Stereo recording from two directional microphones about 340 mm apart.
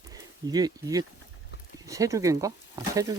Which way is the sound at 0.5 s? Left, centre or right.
Centre.